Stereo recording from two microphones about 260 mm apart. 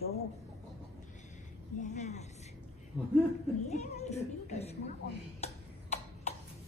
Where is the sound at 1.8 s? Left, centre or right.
Left.